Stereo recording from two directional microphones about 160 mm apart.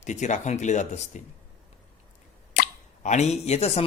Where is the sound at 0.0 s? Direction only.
50° left (ahead or behind).